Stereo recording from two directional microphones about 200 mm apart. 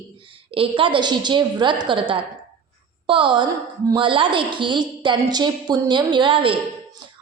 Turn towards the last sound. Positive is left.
turn(degrees=-25)  # may be behind; listen again after turning